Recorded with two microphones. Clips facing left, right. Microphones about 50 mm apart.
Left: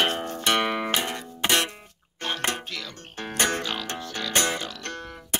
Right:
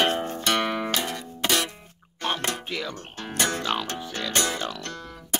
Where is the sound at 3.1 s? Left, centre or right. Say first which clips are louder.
Left 2 dB; left.